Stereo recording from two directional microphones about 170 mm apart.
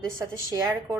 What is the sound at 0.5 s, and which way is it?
Speech, 20° right (ahead or behind).